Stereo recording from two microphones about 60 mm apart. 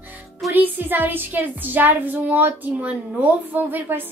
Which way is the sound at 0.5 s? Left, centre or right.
Right.